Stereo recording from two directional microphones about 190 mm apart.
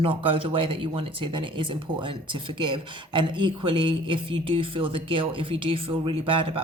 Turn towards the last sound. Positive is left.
turn(degrees=-30)  # may be behind; listen again after turning